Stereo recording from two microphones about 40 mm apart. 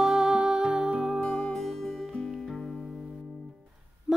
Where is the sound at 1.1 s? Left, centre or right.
Left.